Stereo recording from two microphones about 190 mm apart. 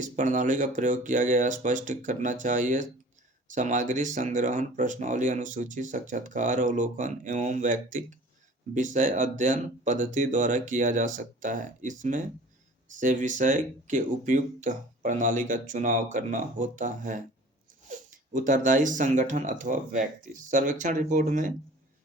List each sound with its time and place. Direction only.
0.0 s speech: 40° right (ahead or behind)